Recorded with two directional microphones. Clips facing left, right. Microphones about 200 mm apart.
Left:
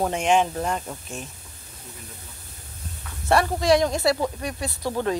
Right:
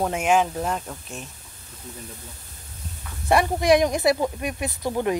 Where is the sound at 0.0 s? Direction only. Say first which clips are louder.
Even; 5° right (ahead or behind).